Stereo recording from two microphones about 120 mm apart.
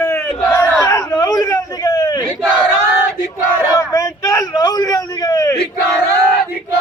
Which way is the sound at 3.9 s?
25° left (ahead or behind).